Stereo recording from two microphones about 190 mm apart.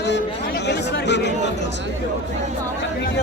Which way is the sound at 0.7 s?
65° left (ahead or behind).